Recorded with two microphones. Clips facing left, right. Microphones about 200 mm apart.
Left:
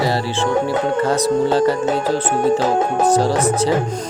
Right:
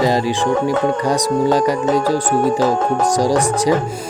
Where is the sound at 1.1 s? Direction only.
15° right (ahead or behind).